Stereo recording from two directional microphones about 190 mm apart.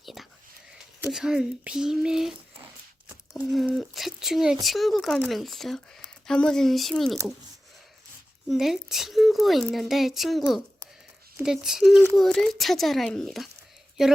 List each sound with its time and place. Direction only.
0.0 s whispering: centre (ahead or behind)
1.0 s speech: 5° right (ahead or behind)
8.4 s speech: centre (ahead or behind)